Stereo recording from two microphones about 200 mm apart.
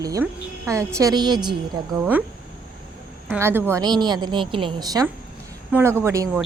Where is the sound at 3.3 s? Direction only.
10° right (ahead or behind).